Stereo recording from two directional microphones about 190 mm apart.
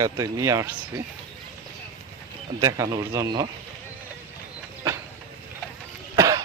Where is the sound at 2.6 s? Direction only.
20° right (ahead or behind).